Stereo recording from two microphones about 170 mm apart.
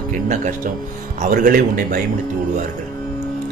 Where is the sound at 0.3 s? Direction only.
50° right (ahead or behind).